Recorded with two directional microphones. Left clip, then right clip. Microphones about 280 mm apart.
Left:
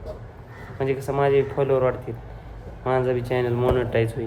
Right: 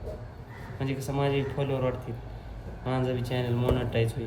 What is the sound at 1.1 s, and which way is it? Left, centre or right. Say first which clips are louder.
A man's voice: left 8 dB; left.